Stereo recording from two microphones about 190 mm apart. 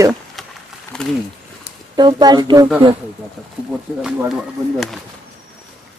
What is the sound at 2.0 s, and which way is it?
Speech, 20° right (ahead or behind).